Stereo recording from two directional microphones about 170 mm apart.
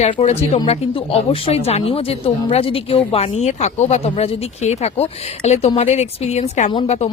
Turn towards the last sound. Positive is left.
turn(degrees=30)  # may be behind; listen again after turning